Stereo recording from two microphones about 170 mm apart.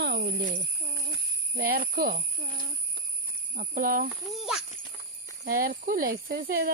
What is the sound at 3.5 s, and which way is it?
Speech, 55° right (ahead or behind).